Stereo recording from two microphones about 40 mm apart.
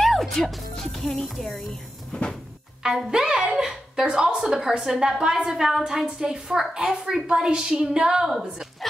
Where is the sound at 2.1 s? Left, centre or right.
Left.